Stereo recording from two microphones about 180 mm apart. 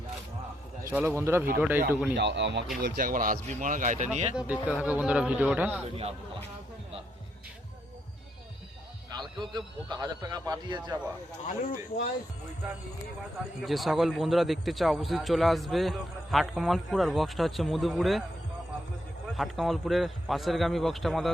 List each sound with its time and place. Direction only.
0.9 s a man's voice: 15° right (ahead or behind)
2.1 s speech: 75° right (ahead or behind)
2.8 s speech: 55° right (ahead or behind)
4.8 s a man's voice: 5° right (ahead or behind)
9.1 s a man's voice: 25° right (ahead or behind)
11.4 s speech: 50° left (ahead or behind)
13.6 s a man's voice: centre (ahead or behind)
19.4 s a man's voice: centre (ahead or behind)